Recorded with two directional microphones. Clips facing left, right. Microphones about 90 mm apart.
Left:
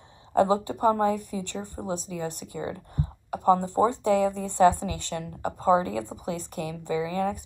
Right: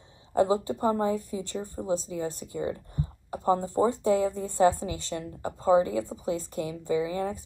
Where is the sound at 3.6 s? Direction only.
25° left (ahead or behind).